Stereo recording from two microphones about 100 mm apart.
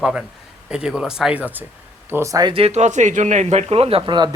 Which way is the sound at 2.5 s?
80° right.